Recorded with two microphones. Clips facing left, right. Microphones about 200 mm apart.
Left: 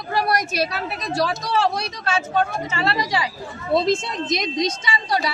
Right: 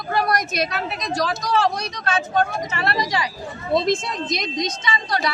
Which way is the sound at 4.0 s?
25° left (ahead or behind).